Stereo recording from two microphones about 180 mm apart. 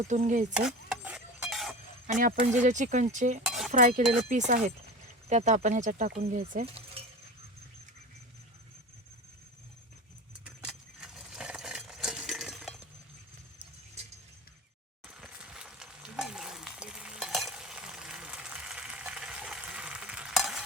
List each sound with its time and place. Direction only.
0.1 s speech: 40° right (ahead or behind)
0.5 s cutlery: 5° right (ahead or behind)
2.1 s speech: 45° right (ahead or behind)
3.4 s chink: centre (ahead or behind)
3.7 s speech: 45° right (ahead or behind)
6.7 s keys jangling: 35° right (ahead or behind)
10.4 s a sound: 5° right (ahead or behind)
15.0 s stir: 5° right (ahead or behind)